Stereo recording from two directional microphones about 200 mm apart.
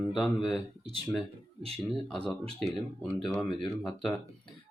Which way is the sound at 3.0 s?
Centre (ahead or behind).